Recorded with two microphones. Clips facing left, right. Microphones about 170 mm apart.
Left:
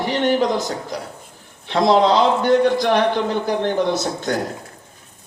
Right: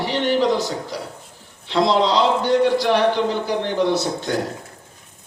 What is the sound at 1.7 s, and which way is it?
A man's voice, 50° left (ahead or behind).